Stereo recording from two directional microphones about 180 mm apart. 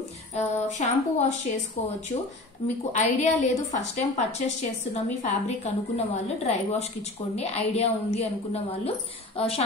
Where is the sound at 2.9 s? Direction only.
40° left (ahead or behind).